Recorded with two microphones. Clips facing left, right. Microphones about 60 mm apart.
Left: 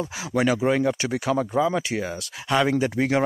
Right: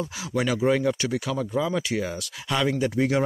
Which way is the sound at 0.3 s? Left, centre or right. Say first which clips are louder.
Left 1 dB; left.